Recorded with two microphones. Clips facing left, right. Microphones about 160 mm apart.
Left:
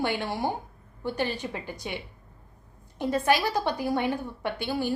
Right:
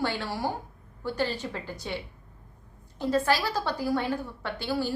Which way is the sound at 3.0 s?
15° left (ahead or behind).